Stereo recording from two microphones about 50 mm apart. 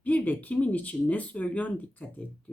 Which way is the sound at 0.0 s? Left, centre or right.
Left.